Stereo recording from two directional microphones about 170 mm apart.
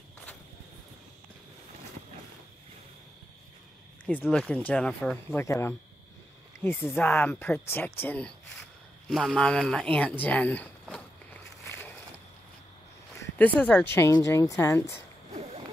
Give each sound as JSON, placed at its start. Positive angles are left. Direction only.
{"t": 4.0, "sound": "speech", "side_deg": 10}
{"t": 10.2, "sound": "walk", "side_deg": 10}
{"t": 13.2, "sound": "speech", "side_deg": 10}